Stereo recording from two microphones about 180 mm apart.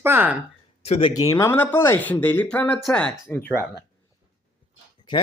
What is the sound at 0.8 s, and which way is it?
Speech, 35° left (ahead or behind).